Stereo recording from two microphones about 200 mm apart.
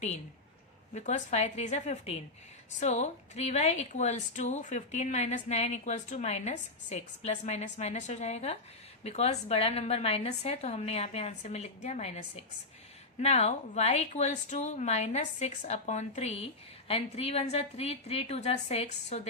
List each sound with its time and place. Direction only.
0.9 s speech: 35° left (ahead or behind)